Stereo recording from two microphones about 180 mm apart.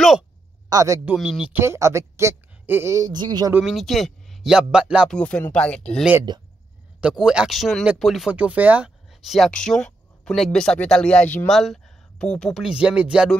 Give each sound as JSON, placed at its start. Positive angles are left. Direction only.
{"t": 0.7, "sound": "speech", "side_deg": -20}
{"t": 1.1, "sound": "speech", "side_deg": -5}
{"t": 3.5, "sound": "speech", "side_deg": 0}
{"t": 5.1, "sound": "speech", "side_deg": 5}
{"t": 6.3, "sound": "speech", "side_deg": -25}
{"t": 7.0, "sound": "speech", "side_deg": -5}